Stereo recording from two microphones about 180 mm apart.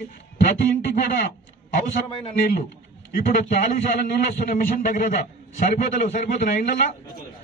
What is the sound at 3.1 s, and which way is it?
A man's voice, 50° left (ahead or behind).